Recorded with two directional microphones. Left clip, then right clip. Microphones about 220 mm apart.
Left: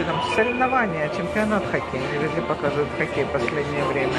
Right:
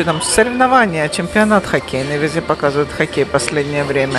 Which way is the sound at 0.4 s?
35° right (ahead or behind).